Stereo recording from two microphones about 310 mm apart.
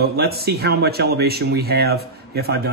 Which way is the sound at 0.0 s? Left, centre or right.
Right.